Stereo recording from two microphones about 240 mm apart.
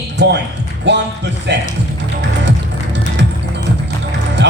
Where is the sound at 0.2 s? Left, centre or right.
Right.